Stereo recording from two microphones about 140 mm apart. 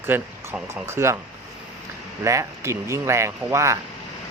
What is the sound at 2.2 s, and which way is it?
Speech, 20° right (ahead or behind).